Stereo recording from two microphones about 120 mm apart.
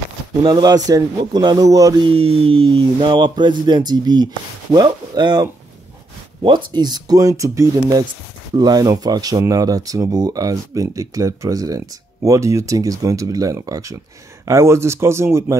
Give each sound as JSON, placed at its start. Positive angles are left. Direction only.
{"t": 0.4, "sound": "speech", "side_deg": -35}
{"t": 2.0, "sound": "speech", "side_deg": -50}